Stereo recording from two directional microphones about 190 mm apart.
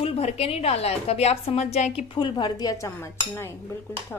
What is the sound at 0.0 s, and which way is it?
A woman's voice, 30° left (ahead or behind).